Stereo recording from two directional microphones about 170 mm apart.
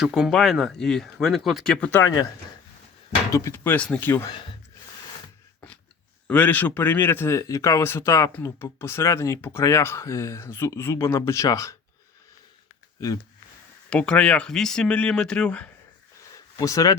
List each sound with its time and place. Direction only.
0.0 s speech: centre (ahead or behind)
3.3 s speech: 15° left (ahead or behind)
6.2 s speech: 10° left (ahead or behind)
13.9 s speech: 5° left (ahead or behind)
16.6 s speech: 20° left (ahead or behind)